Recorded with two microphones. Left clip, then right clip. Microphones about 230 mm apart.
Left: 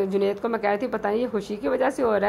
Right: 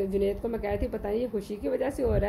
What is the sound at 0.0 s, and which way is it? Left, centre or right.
Speech, centre.